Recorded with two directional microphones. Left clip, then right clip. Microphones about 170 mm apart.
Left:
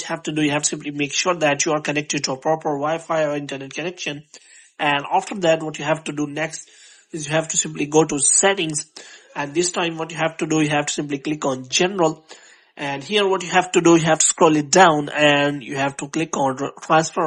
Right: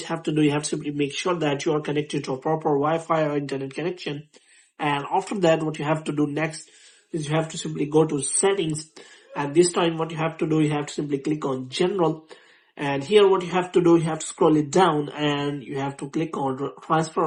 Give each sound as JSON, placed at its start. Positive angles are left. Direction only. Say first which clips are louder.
{"t": 0.0, "sound": "speech", "louder": "left 1 dB", "side_deg": 25}
{"t": 2.5, "sound": "speech", "louder": "left 1 dB", "side_deg": 25}
{"t": 7.1, "sound": "speech", "louder": "left 4 dB", "side_deg": 35}